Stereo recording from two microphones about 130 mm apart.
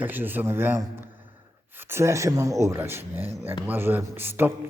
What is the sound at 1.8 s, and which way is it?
A man's voice, 20° right (ahead or behind).